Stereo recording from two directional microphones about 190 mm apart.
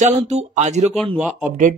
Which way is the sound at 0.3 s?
35° right (ahead or behind).